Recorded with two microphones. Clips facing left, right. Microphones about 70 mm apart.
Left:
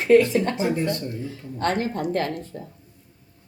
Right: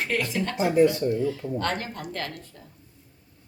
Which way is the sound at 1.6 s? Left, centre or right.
Left.